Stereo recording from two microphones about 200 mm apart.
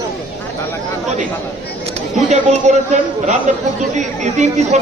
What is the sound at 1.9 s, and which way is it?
Speech, 35° right (ahead or behind).